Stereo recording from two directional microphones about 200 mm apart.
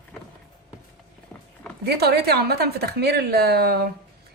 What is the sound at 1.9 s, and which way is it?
A woman's voice, 55° right (ahead or behind).